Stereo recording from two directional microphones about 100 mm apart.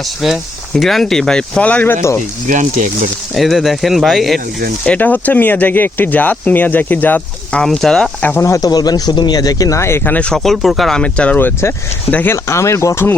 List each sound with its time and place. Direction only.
0.2 s speech: centre (ahead or behind); by 2.1 s 25° left (ahead or behind)
3.3 s speech: centre (ahead or behind)
4.9 s speech: 15° left (ahead or behind)
7.6 s speech: 5° left (ahead or behind)
8.2 s speech: 20° left (ahead or behind)
8.4 s speech: 35° left (ahead or behind); by 11.3 s 10° left (ahead or behind)
11.3 s speech: 20° left (ahead or behind)